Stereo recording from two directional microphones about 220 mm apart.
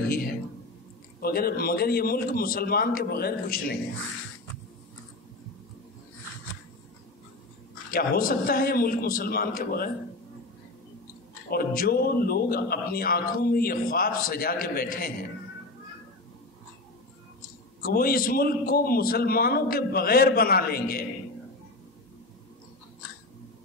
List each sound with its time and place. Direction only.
1.2 s a man's voice: 45° left (ahead or behind)
7.9 s a man's voice: 40° left (ahead or behind)
11.5 s a man's voice: 45° left (ahead or behind)
17.7 s a man's voice: 40° left (ahead or behind)